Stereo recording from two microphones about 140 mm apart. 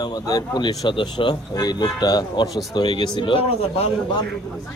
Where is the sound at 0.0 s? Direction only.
25° left (ahead or behind).